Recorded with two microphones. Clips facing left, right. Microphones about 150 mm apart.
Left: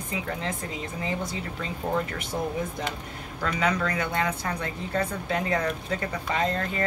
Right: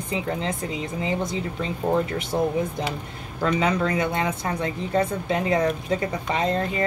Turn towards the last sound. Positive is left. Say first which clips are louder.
# right 3 dB
turn(degrees=-20)  # may be behind; listen again after turning